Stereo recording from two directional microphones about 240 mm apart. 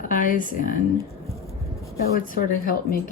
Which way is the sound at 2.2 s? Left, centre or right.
Left.